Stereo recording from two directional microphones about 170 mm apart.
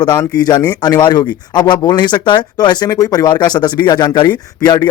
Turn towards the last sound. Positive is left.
turn(degrees=25)  # may be behind; listen again after turning